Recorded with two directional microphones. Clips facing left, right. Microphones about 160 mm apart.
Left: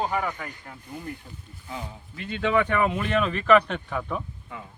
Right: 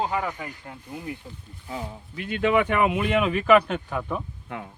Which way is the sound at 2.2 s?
10° right (ahead or behind).